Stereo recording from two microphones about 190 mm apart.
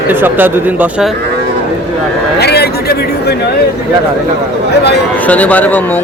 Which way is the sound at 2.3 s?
60° left (ahead or behind).